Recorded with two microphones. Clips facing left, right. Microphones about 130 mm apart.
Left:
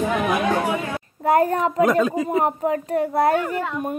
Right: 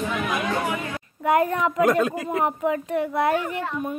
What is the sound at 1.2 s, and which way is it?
A child's voice, 35° left (ahead or behind).